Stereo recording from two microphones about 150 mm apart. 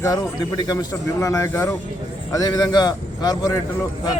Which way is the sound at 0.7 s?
25° left (ahead or behind).